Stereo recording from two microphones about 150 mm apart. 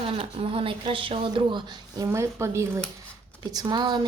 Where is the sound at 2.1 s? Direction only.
20° right (ahead or behind).